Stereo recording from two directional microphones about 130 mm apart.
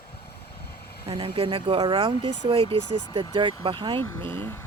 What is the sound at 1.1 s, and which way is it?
Speech, 40° right (ahead or behind).